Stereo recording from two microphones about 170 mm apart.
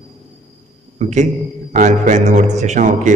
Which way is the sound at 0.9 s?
45° right (ahead or behind).